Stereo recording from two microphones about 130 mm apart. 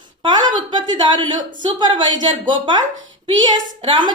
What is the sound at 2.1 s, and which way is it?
Speech, 75° right (ahead or behind).